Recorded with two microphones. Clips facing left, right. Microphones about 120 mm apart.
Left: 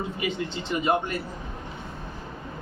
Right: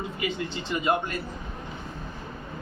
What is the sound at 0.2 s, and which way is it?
Speech, 20° left (ahead or behind).